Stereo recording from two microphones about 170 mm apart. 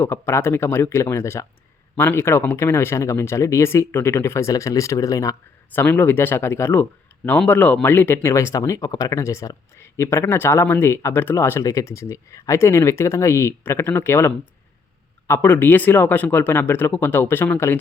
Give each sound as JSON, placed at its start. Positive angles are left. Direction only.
{"t": 0.0, "sound": "speech", "side_deg": 15}